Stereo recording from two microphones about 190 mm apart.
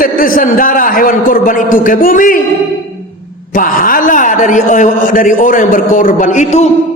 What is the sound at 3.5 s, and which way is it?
A man's voice, 45° left (ahead or behind).